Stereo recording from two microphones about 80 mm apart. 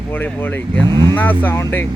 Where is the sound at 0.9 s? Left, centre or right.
Right.